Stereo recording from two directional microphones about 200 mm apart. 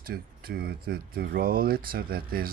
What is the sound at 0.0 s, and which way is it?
Speech, 50° right (ahead or behind).